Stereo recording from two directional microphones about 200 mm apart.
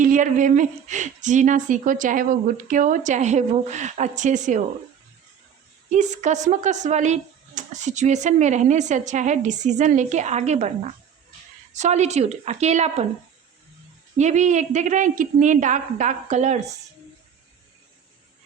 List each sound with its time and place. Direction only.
0.0 s speech: 40° right (ahead or behind)
5.9 s speech: 35° right (ahead or behind)
14.2 s speech: 35° right (ahead or behind)